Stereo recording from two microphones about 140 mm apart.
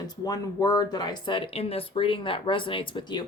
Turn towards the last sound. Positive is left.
turn(degrees=35)  # may be behind; listen again after turning